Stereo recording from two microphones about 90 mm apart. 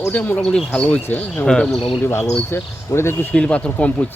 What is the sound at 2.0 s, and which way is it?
Speech, 25° left (ahead or behind).